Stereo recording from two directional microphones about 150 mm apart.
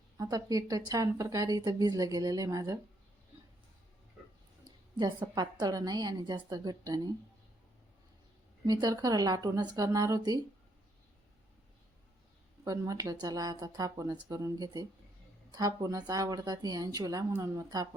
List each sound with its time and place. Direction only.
0.2 s a woman's voice: 25° right (ahead or behind)
4.9 s a woman's voice: 25° right (ahead or behind)
8.6 s a woman's voice: 25° right (ahead or behind)
12.6 s a woman's voice: 25° right (ahead or behind)